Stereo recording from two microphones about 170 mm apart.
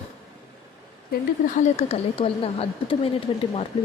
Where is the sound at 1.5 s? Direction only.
40° left (ahead or behind).